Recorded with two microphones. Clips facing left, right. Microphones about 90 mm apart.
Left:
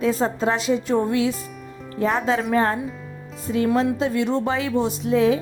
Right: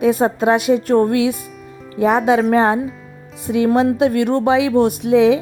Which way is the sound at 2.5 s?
80° right.